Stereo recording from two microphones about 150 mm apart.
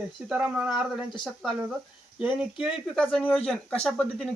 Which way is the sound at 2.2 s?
5° right (ahead or behind).